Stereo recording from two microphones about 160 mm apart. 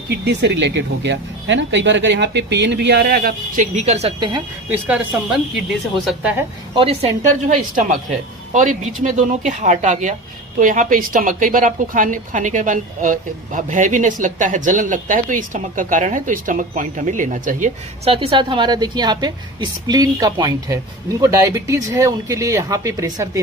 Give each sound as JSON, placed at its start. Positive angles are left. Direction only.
{"t": 0.1, "sound": "speech", "side_deg": -90}
{"t": 4.2, "sound": "a woman's voice", "side_deg": -25}
{"t": 6.1, "sound": "a woman's voice", "side_deg": -5}
{"t": 6.7, "sound": "a woman's voice", "side_deg": -40}
{"t": 18.0, "sound": "a woman's voice", "side_deg": -35}